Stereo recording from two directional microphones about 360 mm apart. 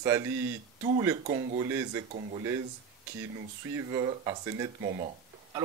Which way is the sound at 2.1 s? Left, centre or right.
Centre.